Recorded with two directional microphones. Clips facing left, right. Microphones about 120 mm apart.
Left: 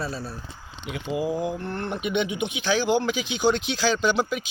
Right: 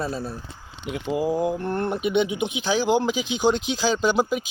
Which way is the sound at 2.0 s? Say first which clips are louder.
Right 2 dB; 35° right (ahead or behind).